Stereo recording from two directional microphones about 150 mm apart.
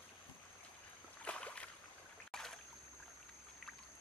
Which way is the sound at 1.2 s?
10° left (ahead or behind).